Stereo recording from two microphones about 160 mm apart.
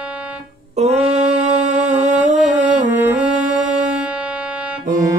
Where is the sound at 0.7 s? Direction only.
40° right (ahead or behind).